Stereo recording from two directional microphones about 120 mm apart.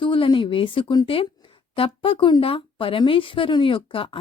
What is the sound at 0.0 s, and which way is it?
A woman's voice, 45° left (ahead or behind).